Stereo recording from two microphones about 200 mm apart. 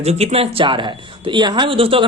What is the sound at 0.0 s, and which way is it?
Speech, 30° right (ahead or behind).